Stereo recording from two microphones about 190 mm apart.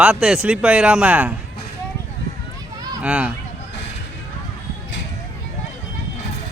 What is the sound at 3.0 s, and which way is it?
Speech, 5° right (ahead or behind).